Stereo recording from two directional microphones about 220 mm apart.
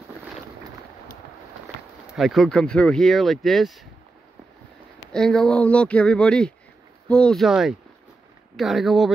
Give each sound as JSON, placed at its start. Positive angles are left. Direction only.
{"t": 2.1, "sound": "speech", "side_deg": 0}
{"t": 5.1, "sound": "speech", "side_deg": 0}